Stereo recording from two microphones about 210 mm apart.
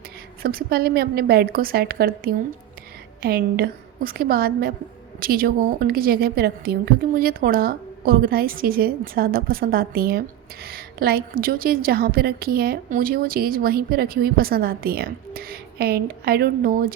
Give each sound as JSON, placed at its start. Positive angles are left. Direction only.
{"t": 0.4, "sound": "a woman's voice", "side_deg": -45}